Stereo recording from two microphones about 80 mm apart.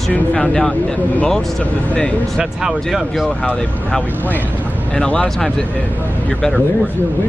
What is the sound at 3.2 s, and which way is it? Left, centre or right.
Speech, centre.